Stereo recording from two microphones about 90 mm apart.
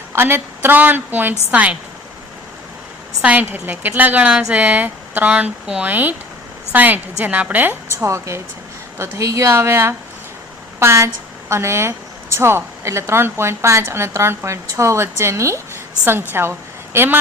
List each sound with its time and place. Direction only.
0.1 s a woman's voice: 25° right (ahead or behind)
3.2 s a woman's voice: 15° right (ahead or behind)
7.9 s a woman's voice: 35° right (ahead or behind)